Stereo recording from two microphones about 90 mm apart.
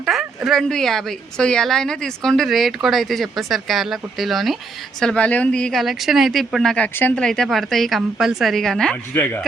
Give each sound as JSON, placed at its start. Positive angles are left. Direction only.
{"t": 0.0, "sound": "a woman's voice", "side_deg": -5}
{"t": 4.9, "sound": "a woman's voice", "side_deg": 10}
{"t": 5.8, "sound": "a woman's voice", "side_deg": 0}
{"t": 6.8, "sound": "speech", "side_deg": 20}
{"t": 7.2, "sound": "a woman's voice", "side_deg": 5}
{"t": 9.1, "sound": "speech", "side_deg": 25}